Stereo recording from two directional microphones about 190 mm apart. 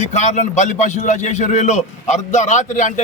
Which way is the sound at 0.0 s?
35° left (ahead or behind).